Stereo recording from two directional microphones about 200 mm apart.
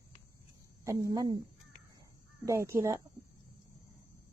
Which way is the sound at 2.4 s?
15° right (ahead or behind).